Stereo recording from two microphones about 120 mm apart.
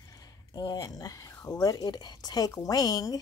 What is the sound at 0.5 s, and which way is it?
A woman's voice, 35° left (ahead or behind).